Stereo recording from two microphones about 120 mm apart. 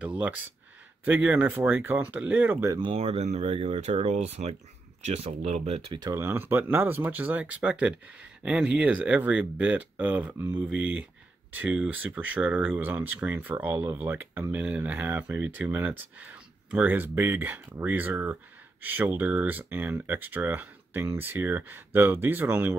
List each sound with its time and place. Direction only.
0.0 s a sound: 10° right (ahead or behind)
1.0 s speech: 15° right (ahead or behind)
2.7 s speech: 40° right (ahead or behind)
3.0 s speech: 60° right (ahead or behind)
4.1 s speech: 70° right (ahead or behind)
6.1 s speech: 20° right (ahead or behind)